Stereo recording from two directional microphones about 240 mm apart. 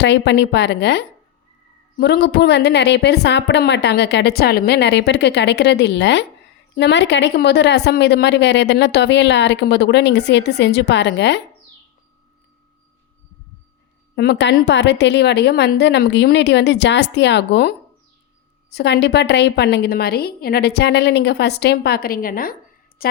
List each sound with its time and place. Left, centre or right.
0.0 s a woman's voice: left
14.2 s a woman's voice: left